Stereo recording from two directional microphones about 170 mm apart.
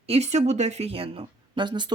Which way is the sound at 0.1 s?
40° right (ahead or behind).